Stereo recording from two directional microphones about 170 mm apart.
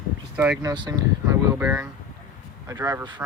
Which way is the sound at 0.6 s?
25° right (ahead or behind).